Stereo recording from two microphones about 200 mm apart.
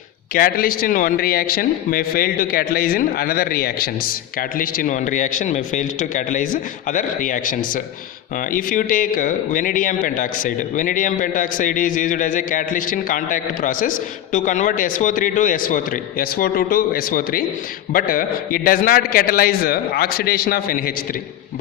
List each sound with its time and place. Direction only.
0.3 s a man's voice: 45° left (ahead or behind)